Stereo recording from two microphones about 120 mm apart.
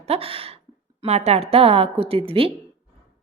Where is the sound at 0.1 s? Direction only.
50° right (ahead or behind).